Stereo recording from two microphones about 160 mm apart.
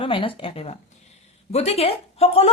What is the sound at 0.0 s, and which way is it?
Speech, 35° left (ahead or behind).